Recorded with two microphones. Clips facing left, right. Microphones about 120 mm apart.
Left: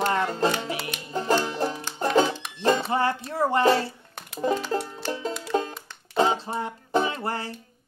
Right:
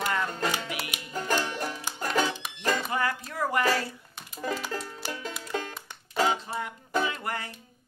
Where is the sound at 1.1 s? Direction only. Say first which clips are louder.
Left 5 dB; 25° left (ahead or behind).